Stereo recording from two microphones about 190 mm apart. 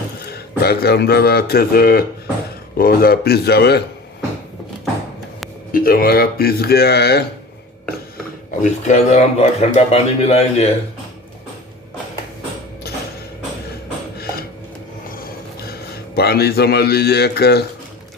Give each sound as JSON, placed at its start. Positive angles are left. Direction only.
{"t": 0.3, "sound": "speech", "side_deg": 55}
{"t": 5.7, "sound": "speech", "side_deg": 50}
{"t": 8.6, "sound": "speech", "side_deg": 40}
{"t": 15.7, "sound": "a man's voice", "side_deg": 55}